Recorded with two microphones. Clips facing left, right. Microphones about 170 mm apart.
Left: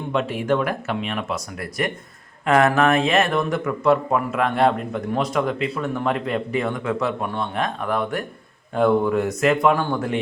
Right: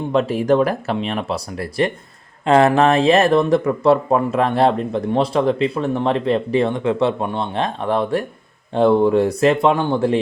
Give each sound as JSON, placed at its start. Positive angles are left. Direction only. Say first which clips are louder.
{"t": 0.1, "sound": "speech", "louder": "right 5 dB", "side_deg": -35}